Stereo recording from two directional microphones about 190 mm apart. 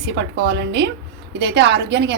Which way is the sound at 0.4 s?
65° right (ahead or behind).